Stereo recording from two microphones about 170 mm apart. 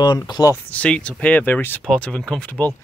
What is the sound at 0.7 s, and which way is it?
Speech, 5° left (ahead or behind).